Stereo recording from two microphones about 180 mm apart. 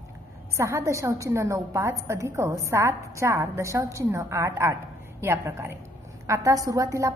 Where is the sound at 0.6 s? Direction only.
15° right (ahead or behind).